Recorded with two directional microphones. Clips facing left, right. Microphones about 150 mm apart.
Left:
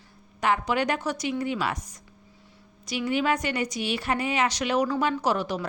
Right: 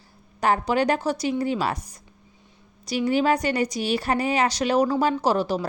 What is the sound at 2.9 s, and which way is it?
A woman's voice, 35° right (ahead or behind).